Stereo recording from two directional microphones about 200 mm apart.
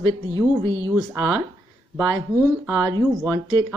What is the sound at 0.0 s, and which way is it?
Speech, 20° right (ahead or behind).